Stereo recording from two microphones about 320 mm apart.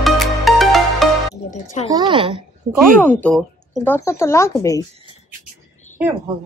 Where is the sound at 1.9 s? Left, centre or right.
Centre.